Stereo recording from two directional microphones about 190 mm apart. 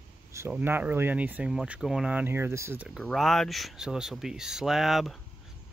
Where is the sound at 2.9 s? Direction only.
Centre (ahead or behind).